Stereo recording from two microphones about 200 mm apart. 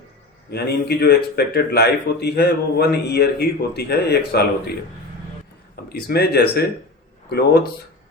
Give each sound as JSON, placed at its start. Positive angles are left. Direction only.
{"t": 0.5, "sound": "a man's voice", "side_deg": 55}
{"t": 5.9, "sound": "a man's voice", "side_deg": 50}